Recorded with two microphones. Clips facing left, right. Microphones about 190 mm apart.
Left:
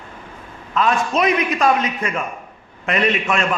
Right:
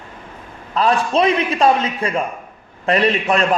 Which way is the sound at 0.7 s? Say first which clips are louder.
Right 2 dB; 35° right (ahead or behind).